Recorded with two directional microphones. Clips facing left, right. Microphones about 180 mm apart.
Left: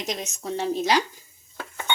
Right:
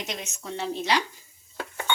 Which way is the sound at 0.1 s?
40° left (ahead or behind).